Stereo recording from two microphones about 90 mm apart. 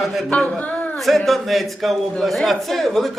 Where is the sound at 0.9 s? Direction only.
Centre (ahead or behind).